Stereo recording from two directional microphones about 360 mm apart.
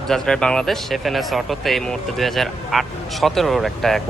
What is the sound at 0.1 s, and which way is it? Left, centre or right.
Speech, centre.